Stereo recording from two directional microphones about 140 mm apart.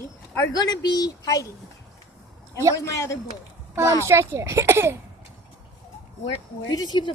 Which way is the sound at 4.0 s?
20° right (ahead or behind).